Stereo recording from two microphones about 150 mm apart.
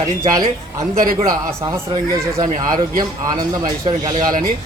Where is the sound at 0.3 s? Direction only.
25° right (ahead or behind).